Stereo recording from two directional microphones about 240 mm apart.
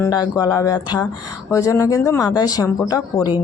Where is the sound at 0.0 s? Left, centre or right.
Centre.